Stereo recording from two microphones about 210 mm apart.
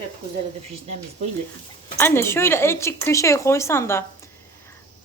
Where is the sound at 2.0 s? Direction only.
10° left (ahead or behind).